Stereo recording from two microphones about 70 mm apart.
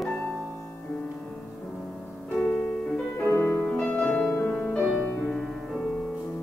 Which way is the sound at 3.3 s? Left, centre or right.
Left.